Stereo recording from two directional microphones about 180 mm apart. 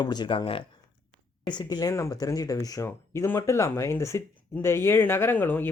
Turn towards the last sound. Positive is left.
turn(degrees=10)  # may be behind; listen again after turning